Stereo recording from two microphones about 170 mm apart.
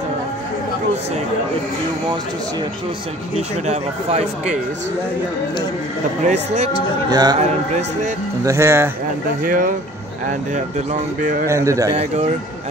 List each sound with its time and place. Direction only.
3.3 s speech: 40° right (ahead or behind)
6.2 s speech: 40° right (ahead or behind)
7.1 s a man's voice: 25° right (ahead or behind)
7.3 s speech: 40° right (ahead or behind)
8.5 s speech: 15° right (ahead or behind)
9.4 s speech: 55° right (ahead or behind)
11.4 s speech: 15° right (ahead or behind)
11.9 s speech: 35° right (ahead or behind)